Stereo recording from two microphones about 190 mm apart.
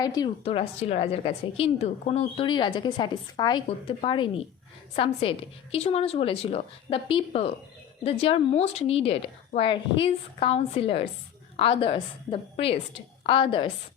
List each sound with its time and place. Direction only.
0.0 s a woman's voice: 20° left (ahead or behind)